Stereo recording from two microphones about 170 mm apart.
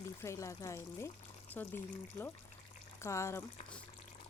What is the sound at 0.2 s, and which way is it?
Speech, 20° left (ahead or behind).